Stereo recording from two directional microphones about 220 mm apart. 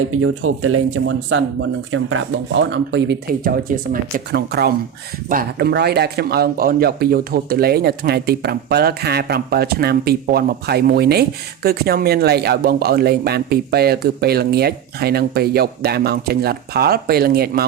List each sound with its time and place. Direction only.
0.1 s a man's voice: 70° right (ahead or behind); by 17.7 s 45° right (ahead or behind)